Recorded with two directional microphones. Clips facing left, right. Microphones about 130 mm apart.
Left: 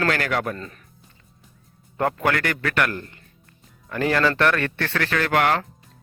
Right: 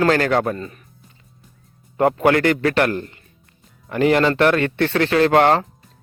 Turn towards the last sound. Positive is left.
turn(degrees=-30)  # may be behind; listen again after turning